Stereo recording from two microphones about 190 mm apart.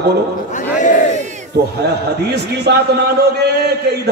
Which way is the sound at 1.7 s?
60° right (ahead or behind).